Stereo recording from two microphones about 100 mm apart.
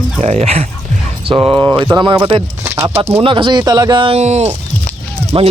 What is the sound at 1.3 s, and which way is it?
Speech, 55° right (ahead or behind).